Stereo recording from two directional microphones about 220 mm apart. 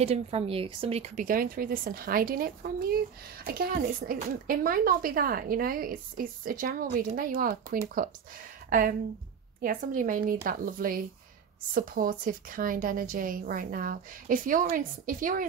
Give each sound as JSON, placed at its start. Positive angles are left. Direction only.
{"t": 0.0, "sound": "a woman's voice", "side_deg": -30}